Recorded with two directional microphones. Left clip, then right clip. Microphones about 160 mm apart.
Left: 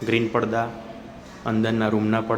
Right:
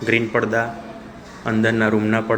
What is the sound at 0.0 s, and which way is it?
Speech, 20° left (ahead or behind).